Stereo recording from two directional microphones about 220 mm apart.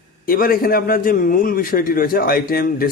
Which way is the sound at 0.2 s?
40° left (ahead or behind).